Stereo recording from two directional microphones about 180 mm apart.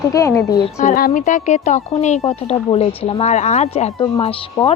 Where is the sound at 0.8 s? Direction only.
45° left (ahead or behind).